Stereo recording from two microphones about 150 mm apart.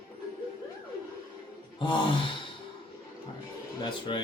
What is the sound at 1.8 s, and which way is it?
Speech, 35° left (ahead or behind).